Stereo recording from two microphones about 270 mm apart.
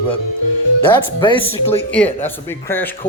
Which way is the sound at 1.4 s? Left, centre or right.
Centre.